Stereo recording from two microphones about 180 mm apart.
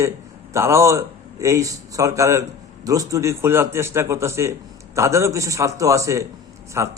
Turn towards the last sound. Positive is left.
turn(degrees=-15)  # may be behind; listen again after turning